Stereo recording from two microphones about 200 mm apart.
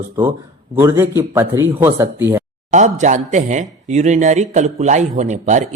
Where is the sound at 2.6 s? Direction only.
35° right (ahead or behind).